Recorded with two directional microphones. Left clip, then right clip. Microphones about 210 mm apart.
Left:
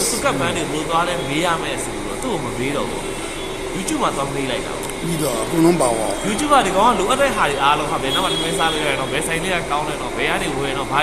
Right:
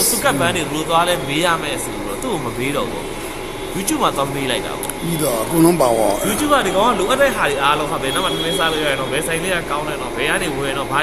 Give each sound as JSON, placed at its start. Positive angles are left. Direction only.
{"t": 0.2, "sound": "speech", "side_deg": -55}
{"t": 1.3, "sound": "speech", "side_deg": -25}
{"t": 3.8, "sound": "speech", "side_deg": -35}
{"t": 5.2, "sound": "speech", "side_deg": -20}
{"t": 6.5, "sound": "speech", "side_deg": -10}